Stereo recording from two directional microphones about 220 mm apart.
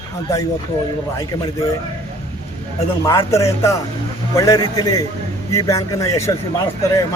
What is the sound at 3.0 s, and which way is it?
A man's voice, 15° left (ahead or behind).